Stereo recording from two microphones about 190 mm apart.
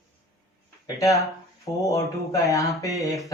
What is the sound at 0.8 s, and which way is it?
A man's voice, 20° left (ahead or behind).